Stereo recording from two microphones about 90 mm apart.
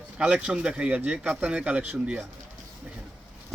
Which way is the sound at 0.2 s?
10° right (ahead or behind).